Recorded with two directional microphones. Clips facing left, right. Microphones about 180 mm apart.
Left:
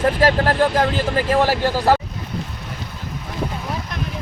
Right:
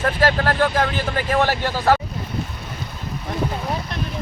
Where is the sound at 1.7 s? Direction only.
10° left (ahead or behind).